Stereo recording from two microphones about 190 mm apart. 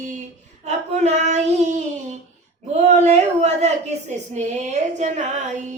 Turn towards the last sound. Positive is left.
turn(degrees=-40)  # may be behind; listen again after turning